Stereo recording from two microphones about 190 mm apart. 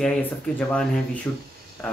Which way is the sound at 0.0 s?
5° left (ahead or behind).